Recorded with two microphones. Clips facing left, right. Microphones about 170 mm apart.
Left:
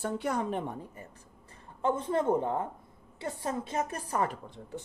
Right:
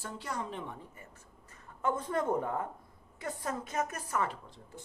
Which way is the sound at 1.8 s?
30° left (ahead or behind).